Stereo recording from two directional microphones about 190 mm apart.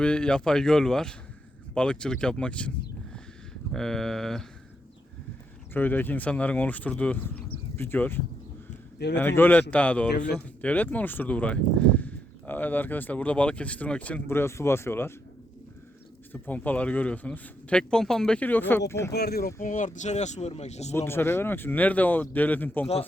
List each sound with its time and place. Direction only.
0.0 s speech: 5° left (ahead or behind)
5.7 s speech: 10° left (ahead or behind)
16.3 s speech: 10° left (ahead or behind)
19.1 s speech: 55° left (ahead or behind)
19.5 s speech: 45° left (ahead or behind)
20.9 s speech: 10° left (ahead or behind)